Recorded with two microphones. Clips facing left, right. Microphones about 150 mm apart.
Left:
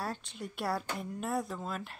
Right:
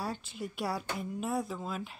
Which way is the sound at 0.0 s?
Centre (ahead or behind).